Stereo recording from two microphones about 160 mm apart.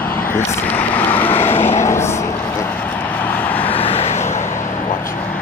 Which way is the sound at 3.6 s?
35° left (ahead or behind).